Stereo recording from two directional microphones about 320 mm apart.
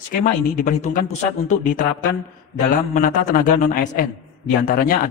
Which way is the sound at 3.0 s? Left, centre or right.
Left.